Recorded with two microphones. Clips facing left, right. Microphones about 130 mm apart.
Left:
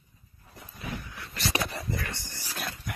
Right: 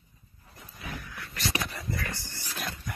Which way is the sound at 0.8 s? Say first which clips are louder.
Left 2 dB; 25° left (ahead or behind).